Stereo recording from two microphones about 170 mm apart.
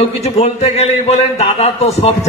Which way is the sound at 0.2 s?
40° left (ahead or behind).